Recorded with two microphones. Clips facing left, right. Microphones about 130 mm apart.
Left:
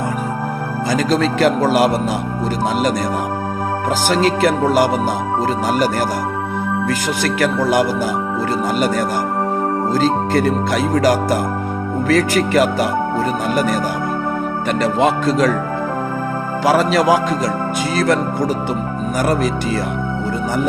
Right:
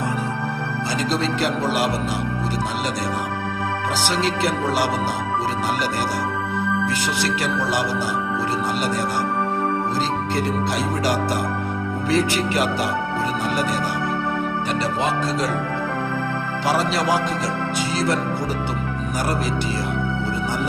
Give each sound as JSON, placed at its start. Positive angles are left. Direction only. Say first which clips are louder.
{"t": 0.9, "sound": "speech", "louder": "left 7 dB", "side_deg": 50}
{"t": 9.9, "sound": "speech", "louder": "left 7 dB", "side_deg": 50}
{"t": 16.6, "sound": "speech", "louder": "left 7 dB", "side_deg": 50}